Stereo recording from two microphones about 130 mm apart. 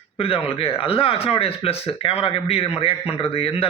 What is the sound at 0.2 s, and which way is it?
Speech, 45° left (ahead or behind).